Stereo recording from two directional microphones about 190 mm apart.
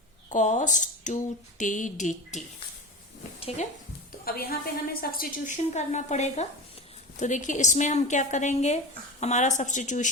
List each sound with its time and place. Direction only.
0.3 s a woman's voice: 40° left (ahead or behind)
4.3 s a woman's voice: 50° left (ahead or behind)